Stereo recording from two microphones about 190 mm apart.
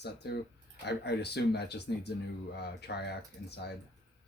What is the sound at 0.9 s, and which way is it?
Speech, 60° left (ahead or behind).